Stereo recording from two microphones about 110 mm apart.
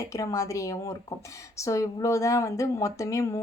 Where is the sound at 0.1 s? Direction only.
30° left (ahead or behind).